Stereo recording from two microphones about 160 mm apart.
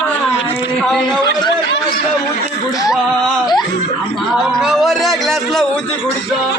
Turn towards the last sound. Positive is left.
turn(degrees=0)  # may be behind; listen again after turning